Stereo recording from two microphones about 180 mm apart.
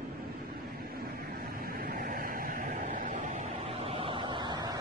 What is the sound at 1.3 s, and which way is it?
Vehicle, 55° right (ahead or behind).